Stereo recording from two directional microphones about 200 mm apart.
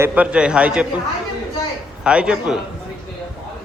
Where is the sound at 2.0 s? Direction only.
5° right (ahead or behind).